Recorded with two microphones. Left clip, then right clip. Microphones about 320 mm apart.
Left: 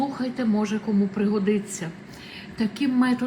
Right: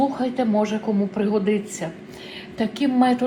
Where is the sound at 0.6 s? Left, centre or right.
Centre.